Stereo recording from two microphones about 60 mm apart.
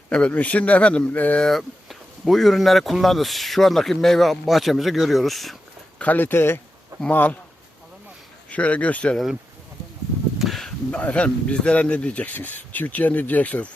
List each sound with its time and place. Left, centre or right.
0.1 s speech: left
1.5 s speech: centre
6.0 s speech: left
7.1 s speech: left
8.4 s speech: left
10.4 s a sound: centre
10.9 s speech: left